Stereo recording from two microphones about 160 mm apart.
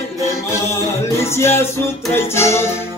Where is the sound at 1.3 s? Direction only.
15° left (ahead or behind).